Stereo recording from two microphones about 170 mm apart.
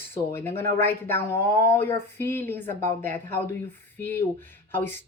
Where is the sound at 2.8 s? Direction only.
45° right (ahead or behind).